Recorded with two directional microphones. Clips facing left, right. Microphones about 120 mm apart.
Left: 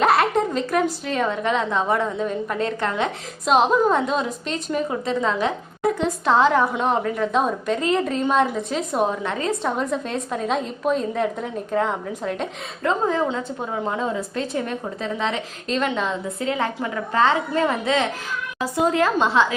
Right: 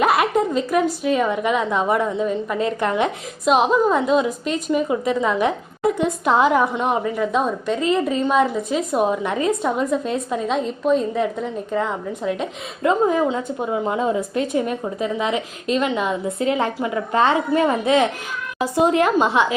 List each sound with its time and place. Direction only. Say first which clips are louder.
0.0 s a woman's voice: right 1 dB; 10° right (ahead or behind)
9.6 s a woman's voice: right 3 dB; 5° right (ahead or behind)
16.4 s a woman's voice: right 3 dB; 20° right (ahead or behind)